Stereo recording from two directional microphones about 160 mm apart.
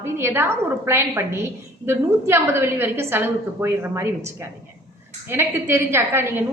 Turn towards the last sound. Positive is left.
turn(degrees=-15)  # may be behind; listen again after turning